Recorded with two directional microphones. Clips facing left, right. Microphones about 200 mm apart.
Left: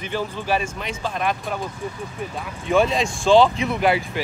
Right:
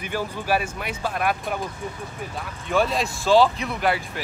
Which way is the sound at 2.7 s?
Centre (ahead or behind).